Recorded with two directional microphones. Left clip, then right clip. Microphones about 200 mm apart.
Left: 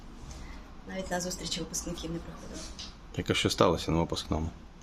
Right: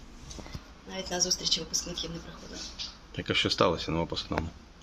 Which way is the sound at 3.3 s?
10° left (ahead or behind).